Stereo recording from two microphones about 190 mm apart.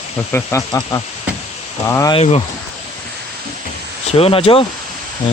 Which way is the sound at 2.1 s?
35° left (ahead or behind).